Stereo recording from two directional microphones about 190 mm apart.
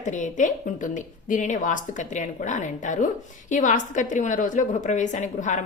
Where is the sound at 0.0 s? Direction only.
40° left (ahead or behind).